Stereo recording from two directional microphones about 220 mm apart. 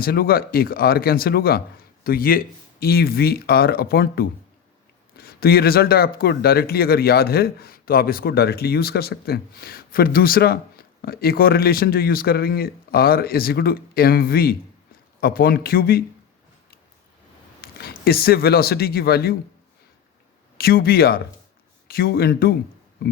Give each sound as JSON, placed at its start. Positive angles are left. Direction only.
{"t": 0.0, "sound": "a man's voice", "side_deg": 40}
{"t": 17.6, "sound": "speech", "side_deg": 45}
{"t": 20.6, "sound": "a man's voice", "side_deg": 45}